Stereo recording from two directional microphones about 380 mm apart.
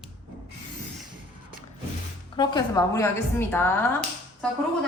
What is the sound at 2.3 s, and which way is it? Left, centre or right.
A woman's voice, centre.